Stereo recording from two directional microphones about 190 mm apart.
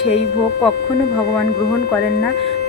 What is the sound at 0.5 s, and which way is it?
Speech, 60° left (ahead or behind).